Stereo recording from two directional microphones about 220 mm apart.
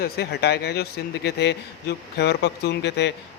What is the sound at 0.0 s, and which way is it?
A man's voice, 45° left (ahead or behind).